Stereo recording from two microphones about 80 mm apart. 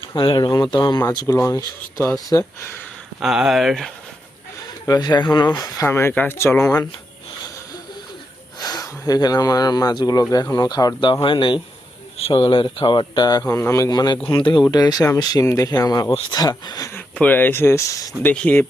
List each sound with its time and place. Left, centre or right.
0.2 s speech: left
1.1 s speech: left
3.2 s speech: centre
4.9 s speech: left
5.8 s speech: left
8.5 s speech: left
11.0 s speech: left
13.6 s speech: left
13.9 s speech: left
14.3 s speech: left
14.6 s speech: left
17.2 s speech: left
18.3 s speech: centre